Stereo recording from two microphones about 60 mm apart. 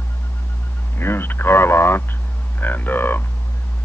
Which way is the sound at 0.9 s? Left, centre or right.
Left.